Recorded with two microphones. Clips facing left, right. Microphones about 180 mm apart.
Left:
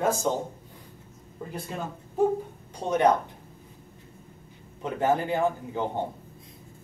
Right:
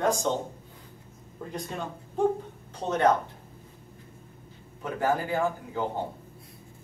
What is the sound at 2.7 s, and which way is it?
Speech, 15° left (ahead or behind).